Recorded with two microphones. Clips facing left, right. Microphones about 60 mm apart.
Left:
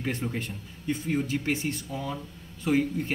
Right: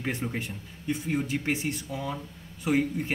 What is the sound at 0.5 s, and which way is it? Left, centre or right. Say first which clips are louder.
Speech: even; centre.